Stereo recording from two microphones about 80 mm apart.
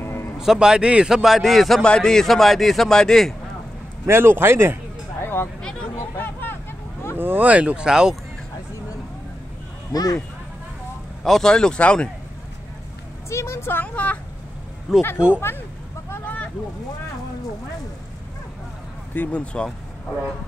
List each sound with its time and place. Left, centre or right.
0.0 s a sound: left
0.4 s a man's voice: centre
4.0 s a man's voice: right
5.2 s a sound: left
5.6 s a sound: centre
6.1 s vehicle: left
7.2 s speech: right; by 8.2 s centre
9.9 s speech: left
11.2 s speech: centre
13.3 s a woman's voice: left
13.8 s speech: centre
15.0 s a woman's voice: left
16.1 s a sound: left
19.1 s speech: centre